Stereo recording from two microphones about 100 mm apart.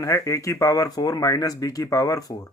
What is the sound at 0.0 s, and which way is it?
Speech, 35° left (ahead or behind).